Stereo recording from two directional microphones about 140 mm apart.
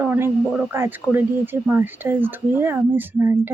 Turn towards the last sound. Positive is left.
turn(degrees=-15)  # may be behind; listen again after turning